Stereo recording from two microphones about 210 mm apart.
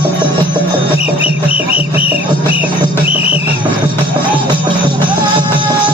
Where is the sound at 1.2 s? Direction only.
5° right (ahead or behind).